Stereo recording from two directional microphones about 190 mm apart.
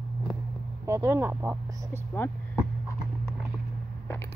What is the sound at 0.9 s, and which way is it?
Speech, 15° right (ahead or behind).